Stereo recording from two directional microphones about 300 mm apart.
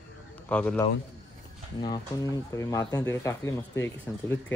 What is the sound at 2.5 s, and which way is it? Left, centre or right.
Speech, centre.